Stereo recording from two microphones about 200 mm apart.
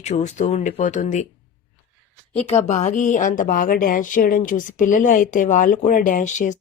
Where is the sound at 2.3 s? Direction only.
30° left (ahead or behind).